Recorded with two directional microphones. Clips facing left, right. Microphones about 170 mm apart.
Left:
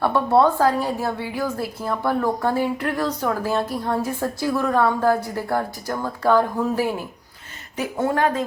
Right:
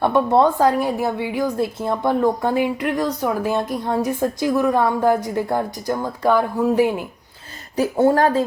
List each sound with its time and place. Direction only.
0.0 s a woman's voice: 20° right (ahead or behind)
7.8 s speech: 35° right (ahead or behind)